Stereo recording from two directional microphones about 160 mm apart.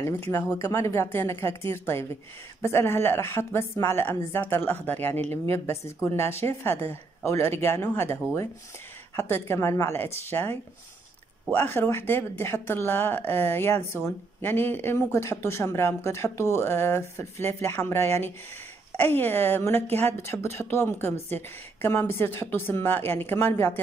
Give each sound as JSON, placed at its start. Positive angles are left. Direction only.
{"t": 0.0, "sound": "speech", "side_deg": 15}